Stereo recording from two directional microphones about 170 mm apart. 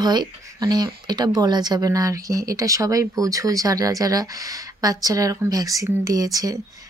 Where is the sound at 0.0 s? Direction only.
25° right (ahead or behind).